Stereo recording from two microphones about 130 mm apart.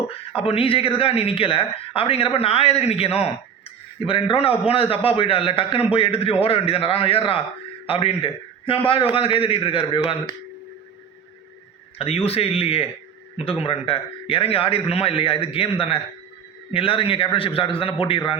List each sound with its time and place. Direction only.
0.3 s speech: 45° left (ahead or behind)
11.9 s speech: 50° left (ahead or behind)